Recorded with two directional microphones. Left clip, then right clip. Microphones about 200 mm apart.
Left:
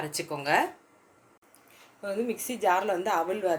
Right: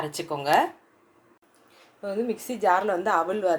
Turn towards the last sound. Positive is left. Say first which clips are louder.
# right 4 dB
turn(degrees=-20)  # may be behind; listen again after turning